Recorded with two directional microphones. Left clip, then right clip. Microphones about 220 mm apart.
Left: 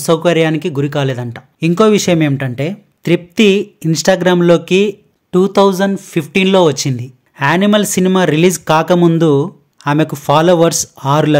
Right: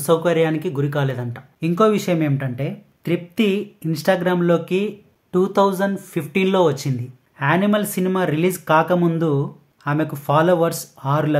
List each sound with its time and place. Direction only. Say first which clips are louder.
0.0 s speech: left 5 dB; 35° left (ahead or behind)